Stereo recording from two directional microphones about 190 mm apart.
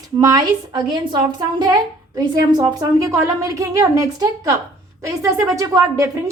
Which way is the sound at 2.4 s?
20° right (ahead or behind).